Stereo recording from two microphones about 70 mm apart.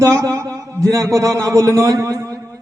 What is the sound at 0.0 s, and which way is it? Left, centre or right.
A man's voice, right.